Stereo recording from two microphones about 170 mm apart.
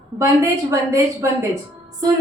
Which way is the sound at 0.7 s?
15° right (ahead or behind).